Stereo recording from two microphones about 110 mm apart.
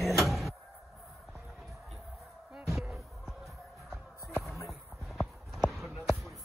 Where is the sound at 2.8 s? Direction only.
5° right (ahead or behind).